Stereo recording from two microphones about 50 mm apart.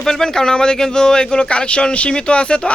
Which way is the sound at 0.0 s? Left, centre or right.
Centre.